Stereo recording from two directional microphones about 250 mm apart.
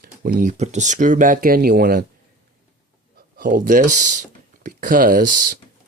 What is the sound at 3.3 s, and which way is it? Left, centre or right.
Speech, right.